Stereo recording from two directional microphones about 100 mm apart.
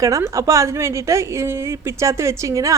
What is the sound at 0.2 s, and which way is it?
A woman's voice, 30° right (ahead or behind).